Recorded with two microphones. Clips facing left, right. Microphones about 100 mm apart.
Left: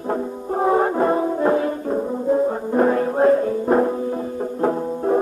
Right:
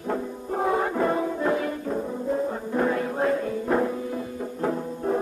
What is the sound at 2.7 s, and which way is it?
Music, 40° left (ahead or behind).